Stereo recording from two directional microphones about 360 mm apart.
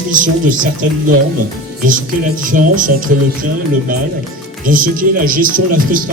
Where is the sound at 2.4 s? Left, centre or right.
Right.